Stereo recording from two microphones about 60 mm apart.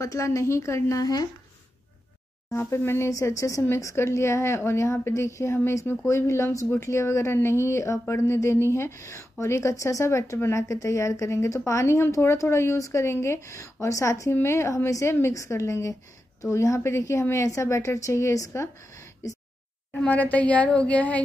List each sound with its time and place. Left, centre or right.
0.0 s speech: left
2.7 s a woman's voice: left
3.1 s speech: left
3.8 s a woman's voice: left
13.0 s speech: left
14.3 s a woman's voice: left
20.1 s a woman's voice: left